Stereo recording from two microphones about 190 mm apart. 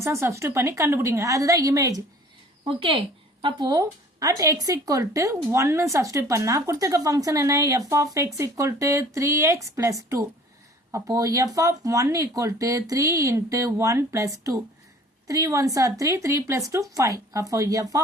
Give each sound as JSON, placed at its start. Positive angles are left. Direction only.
{"t": 0.0, "sound": "speech", "side_deg": -15}
{"t": 2.6, "sound": "a woman's voice", "side_deg": -30}